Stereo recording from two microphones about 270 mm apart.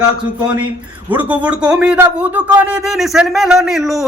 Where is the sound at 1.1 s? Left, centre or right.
Centre.